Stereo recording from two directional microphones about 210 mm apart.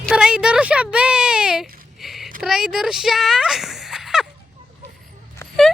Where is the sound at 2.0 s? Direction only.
Centre (ahead or behind).